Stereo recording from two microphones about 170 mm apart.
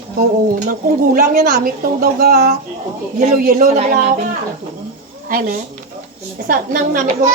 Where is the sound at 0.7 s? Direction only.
55° right (ahead or behind).